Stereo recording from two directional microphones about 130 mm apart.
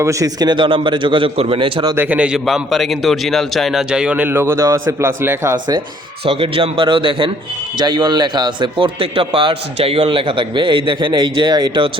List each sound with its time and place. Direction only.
0.0 s a man's voice: 25° right (ahead or behind)
2.0 s a man's voice: 10° right (ahead or behind)
6.2 s a man's voice: 45° right (ahead or behind)